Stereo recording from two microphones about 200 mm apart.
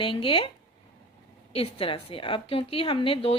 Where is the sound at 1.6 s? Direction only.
25° left (ahead or behind).